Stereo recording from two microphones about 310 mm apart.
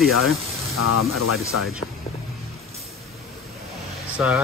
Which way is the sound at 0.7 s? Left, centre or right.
Left.